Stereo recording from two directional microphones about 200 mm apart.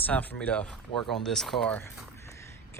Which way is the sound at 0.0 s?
10° left (ahead or behind).